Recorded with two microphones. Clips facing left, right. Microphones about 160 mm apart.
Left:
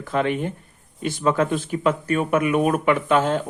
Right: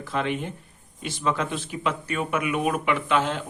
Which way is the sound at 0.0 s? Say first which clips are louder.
Left 5 dB; 50° left (ahead or behind).